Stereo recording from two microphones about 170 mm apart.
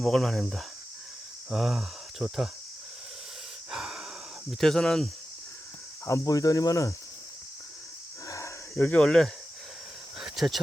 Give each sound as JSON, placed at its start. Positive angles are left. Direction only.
{"t": 0.0, "sound": "speech", "side_deg": 0}
{"t": 3.7, "sound": "breathing", "side_deg": 0}
{"t": 4.6, "sound": "speech", "side_deg": 0}
{"t": 6.1, "sound": "cricket", "side_deg": 20}
{"t": 8.3, "sound": "a sound", "side_deg": 15}
{"t": 10.2, "sound": "cricket", "side_deg": 0}